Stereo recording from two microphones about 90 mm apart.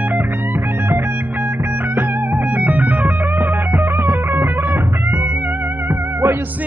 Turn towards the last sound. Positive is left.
turn(degrees=-25)  # may be behind; listen again after turning